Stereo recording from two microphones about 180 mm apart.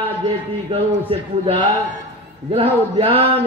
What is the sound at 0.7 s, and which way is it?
A man's voice, 30° right (ahead or behind).